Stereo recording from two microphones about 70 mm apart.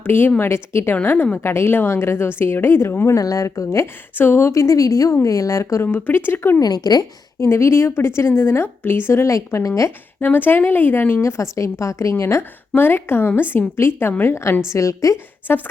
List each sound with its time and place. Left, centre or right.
0.0 s a woman's voice: left
0.9 s a woman's voice: left
3.2 s a woman's voice: left
5.8 s a woman's voice: left
6.6 s a woman's voice: left
7.3 s a woman's voice: left
10.2 s a woman's voice: left
14.7 s a woman's voice: left
15.4 s a woman's voice: left